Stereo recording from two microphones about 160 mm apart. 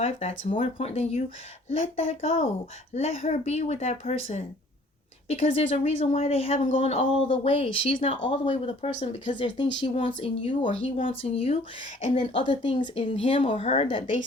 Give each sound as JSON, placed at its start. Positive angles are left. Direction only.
{"t": 0.0, "sound": "speech", "side_deg": 40}
{"t": 7.9, "sound": "speech", "side_deg": 50}
{"t": 8.3, "sound": "speech", "side_deg": 35}